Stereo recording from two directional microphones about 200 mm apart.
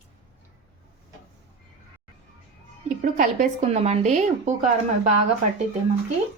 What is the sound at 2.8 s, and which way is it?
A woman's voice, 40° right (ahead or behind).